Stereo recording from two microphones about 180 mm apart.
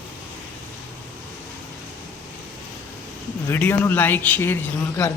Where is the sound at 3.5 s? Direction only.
10° left (ahead or behind).